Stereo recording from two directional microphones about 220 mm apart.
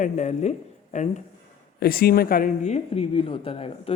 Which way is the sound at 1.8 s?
45° left (ahead or behind).